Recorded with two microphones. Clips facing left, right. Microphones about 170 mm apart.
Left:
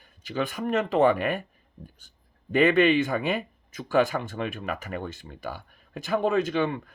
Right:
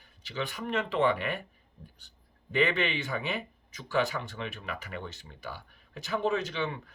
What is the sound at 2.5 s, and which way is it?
Speech, 50° left (ahead or behind).